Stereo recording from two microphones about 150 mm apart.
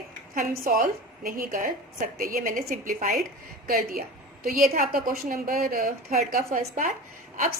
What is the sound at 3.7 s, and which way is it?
A woman's voice, 80° right.